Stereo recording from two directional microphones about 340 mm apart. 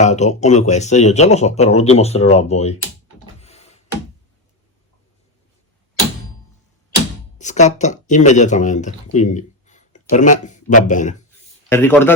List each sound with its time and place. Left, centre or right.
0.0 s speech: centre
3.4 s music: centre
7.3 s speech: left
11.7 s a man's voice: centre